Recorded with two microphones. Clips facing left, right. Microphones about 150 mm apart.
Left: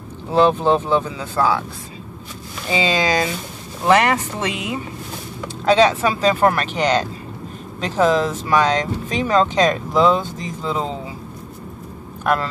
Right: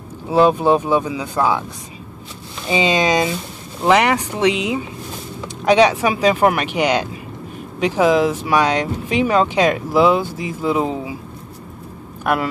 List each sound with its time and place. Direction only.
0.3 s speech: 10° right (ahead or behind)
2.7 s speech: 20° right (ahead or behind)